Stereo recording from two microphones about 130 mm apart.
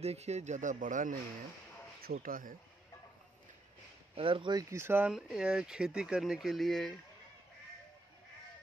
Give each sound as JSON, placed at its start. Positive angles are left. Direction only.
{"t": 0.0, "sound": "speech", "side_deg": -55}
{"t": 2.1, "sound": "speech", "side_deg": -90}
{"t": 4.1, "sound": "speech", "side_deg": -40}
{"t": 4.6, "sound": "speech", "side_deg": -20}
{"t": 5.1, "sound": "speech", "side_deg": -5}